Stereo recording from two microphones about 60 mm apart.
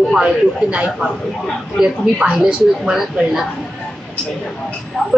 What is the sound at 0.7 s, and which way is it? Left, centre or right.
A woman's voice, right.